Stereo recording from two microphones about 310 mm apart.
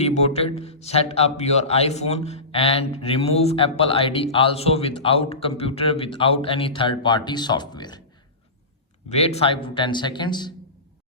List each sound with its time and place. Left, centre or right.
0.0 s a man's voice: left
9.0 s a man's voice: centre